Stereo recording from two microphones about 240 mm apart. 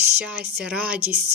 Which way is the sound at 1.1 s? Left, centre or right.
Right.